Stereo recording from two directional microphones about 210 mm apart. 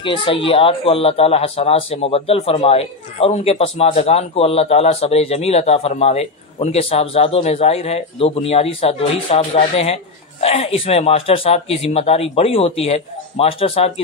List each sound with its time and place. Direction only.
0.0 s speech: 25° left (ahead or behind)